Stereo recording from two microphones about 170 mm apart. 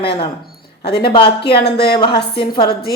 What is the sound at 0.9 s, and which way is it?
Speech, 70° left (ahead or behind).